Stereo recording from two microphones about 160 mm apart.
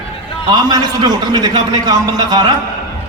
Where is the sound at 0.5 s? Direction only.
25° right (ahead or behind).